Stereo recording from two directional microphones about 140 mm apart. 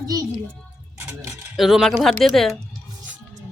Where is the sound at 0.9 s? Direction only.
20° right (ahead or behind).